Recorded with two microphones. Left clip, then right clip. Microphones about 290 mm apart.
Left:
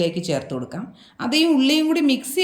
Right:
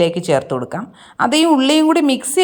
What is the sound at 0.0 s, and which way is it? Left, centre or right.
A woman's voice, centre.